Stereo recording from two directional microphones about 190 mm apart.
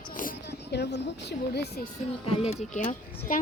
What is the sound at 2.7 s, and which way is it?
Speech, 40° left (ahead or behind).